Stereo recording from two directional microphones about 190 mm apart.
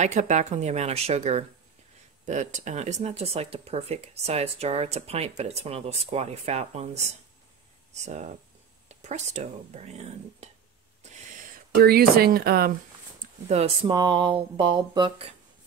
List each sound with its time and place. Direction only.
0.0 s speech: 40° right (ahead or behind)
11.0 s owl: 35° right (ahead or behind)
11.7 s speech: 50° right (ahead or behind)
13.5 s speech: 30° right (ahead or behind)